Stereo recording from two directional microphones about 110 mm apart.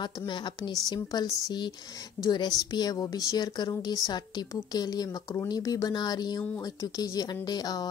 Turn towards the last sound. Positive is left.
turn(degrees=35)  # may be behind; listen again after turning